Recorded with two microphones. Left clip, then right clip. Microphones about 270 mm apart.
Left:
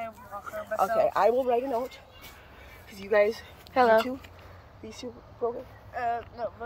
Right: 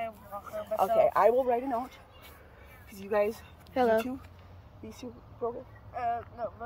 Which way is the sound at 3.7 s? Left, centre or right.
Centre.